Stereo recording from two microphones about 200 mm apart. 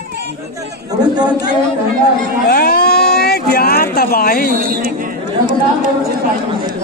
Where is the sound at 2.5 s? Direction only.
50° left (ahead or behind).